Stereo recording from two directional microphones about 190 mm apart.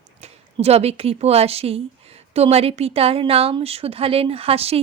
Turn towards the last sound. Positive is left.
turn(degrees=-30)  # may be behind; listen again after turning